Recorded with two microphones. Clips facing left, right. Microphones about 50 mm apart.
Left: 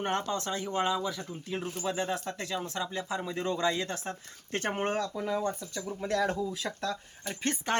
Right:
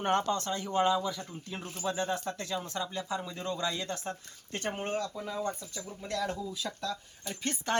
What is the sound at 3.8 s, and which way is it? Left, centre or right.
Speech, left.